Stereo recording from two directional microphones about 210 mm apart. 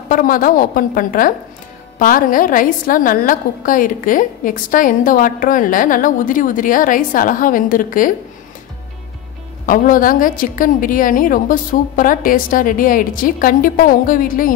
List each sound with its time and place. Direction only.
0.1 s a woman's voice: 40° left (ahead or behind)
9.7 s a woman's voice: 40° left (ahead or behind)